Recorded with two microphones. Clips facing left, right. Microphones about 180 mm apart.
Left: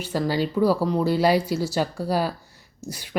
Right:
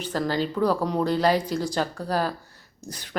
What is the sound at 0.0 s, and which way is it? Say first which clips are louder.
Speech: left 2 dB; 10° left (ahead or behind).